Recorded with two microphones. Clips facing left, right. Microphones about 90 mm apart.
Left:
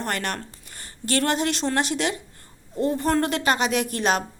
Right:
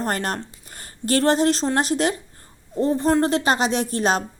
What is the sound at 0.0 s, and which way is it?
Speech, 35° right (ahead or behind).